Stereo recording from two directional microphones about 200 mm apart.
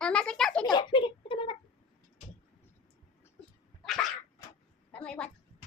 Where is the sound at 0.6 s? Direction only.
20° left (ahead or behind).